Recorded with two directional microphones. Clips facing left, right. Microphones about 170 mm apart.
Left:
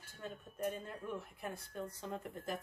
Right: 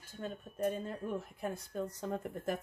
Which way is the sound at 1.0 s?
40° right (ahead or behind).